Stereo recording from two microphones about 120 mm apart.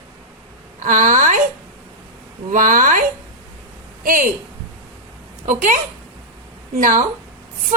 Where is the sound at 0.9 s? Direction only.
90° right.